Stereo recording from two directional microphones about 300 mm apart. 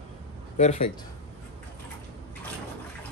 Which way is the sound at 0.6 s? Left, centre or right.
Left.